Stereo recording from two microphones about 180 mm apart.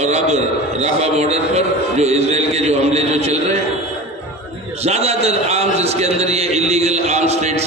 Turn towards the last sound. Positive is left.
turn(degrees=-35)  # may be behind; listen again after turning